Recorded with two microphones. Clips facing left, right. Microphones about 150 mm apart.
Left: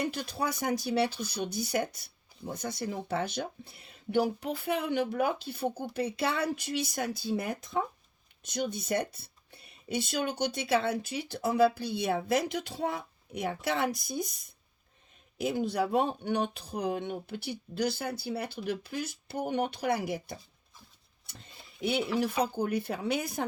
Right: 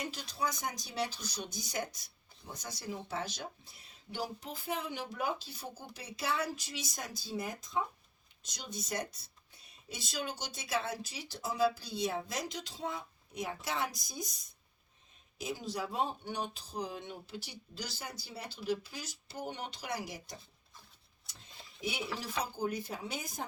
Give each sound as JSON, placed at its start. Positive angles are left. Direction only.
{"t": 0.0, "sound": "speech", "side_deg": 60}